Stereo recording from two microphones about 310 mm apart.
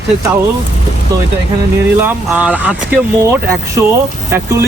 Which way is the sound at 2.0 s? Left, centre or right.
Centre.